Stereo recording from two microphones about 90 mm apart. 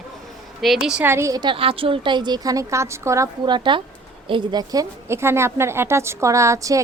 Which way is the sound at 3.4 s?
60° right (ahead or behind).